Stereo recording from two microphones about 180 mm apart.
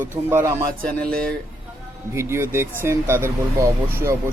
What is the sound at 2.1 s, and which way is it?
Speech, 15° right (ahead or behind).